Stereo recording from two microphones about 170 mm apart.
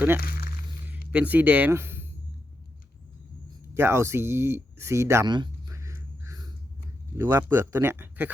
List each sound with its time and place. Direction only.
0.9 s speech: 10° right (ahead or behind)
3.8 s speech: 15° right (ahead or behind)